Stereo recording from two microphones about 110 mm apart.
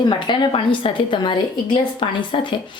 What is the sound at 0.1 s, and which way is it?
A woman's voice, 45° left (ahead or behind).